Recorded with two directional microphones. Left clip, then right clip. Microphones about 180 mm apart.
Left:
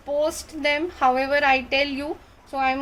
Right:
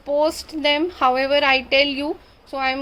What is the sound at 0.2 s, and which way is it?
A woman's voice, 30° right (ahead or behind).